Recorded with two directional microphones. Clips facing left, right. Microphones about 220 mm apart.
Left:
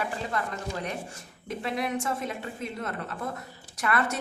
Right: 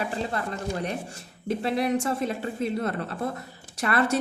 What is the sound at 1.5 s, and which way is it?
A woman's voice, 35° right (ahead or behind).